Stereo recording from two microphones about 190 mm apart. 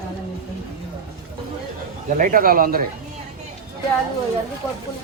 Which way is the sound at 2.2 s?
45° right (ahead or behind).